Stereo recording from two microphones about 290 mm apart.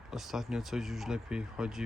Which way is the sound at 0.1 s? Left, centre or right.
Centre.